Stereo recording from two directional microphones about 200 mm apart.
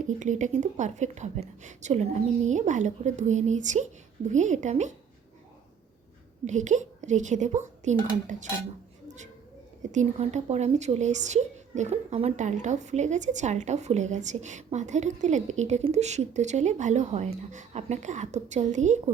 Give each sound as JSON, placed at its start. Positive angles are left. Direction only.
{"t": 0.2, "sound": "a woman's voice", "side_deg": -40}
{"t": 6.4, "sound": "a woman's voice", "side_deg": -35}
{"t": 9.0, "sound": "a sound", "side_deg": -35}
{"t": 9.9, "sound": "a woman's voice", "side_deg": -35}